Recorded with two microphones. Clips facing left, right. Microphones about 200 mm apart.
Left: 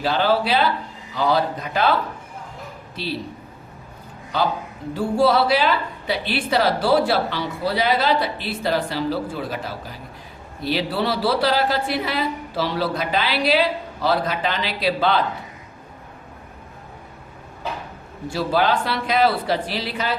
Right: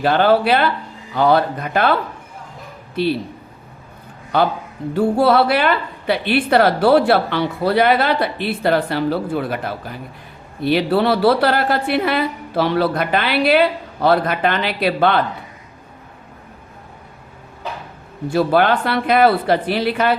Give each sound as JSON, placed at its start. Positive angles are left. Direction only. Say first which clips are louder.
{"t": 0.0, "sound": "a woman's voice", "louder": "right 5 dB", "side_deg": -55}
{"t": 4.3, "sound": "a woman's voice", "louder": "right 5 dB", "side_deg": -60}
{"t": 18.3, "sound": "a woman's voice", "louder": "right 5 dB", "side_deg": -55}